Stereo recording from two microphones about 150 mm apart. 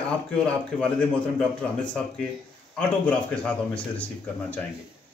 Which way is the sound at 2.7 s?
10° left (ahead or behind).